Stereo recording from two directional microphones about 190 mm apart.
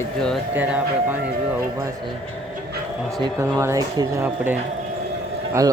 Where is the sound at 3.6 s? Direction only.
15° right (ahead or behind).